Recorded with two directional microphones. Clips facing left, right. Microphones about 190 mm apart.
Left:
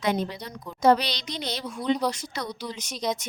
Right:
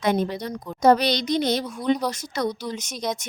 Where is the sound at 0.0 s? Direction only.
50° right (ahead or behind).